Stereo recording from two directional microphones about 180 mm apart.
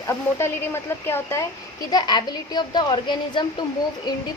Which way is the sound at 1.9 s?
25° left (ahead or behind).